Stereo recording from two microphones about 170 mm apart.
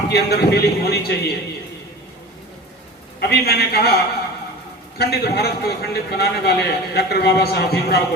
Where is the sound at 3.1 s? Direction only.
70° left (ahead or behind).